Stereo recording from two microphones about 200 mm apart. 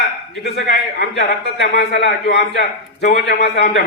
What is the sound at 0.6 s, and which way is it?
A man's voice, 60° left (ahead or behind).